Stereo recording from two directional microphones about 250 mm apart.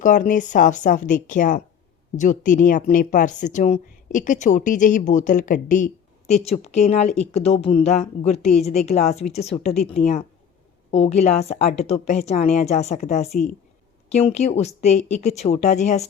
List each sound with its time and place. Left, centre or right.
0.0 s a woman's voice: left